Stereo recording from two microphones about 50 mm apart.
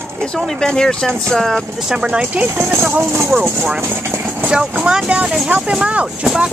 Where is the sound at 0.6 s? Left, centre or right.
Centre.